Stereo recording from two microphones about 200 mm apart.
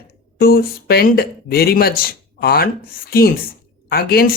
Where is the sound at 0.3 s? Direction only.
50° left (ahead or behind).